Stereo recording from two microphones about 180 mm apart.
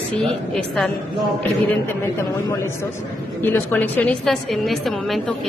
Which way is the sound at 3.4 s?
10° left (ahead or behind).